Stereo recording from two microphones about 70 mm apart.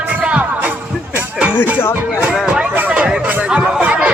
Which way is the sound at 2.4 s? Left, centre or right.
Centre.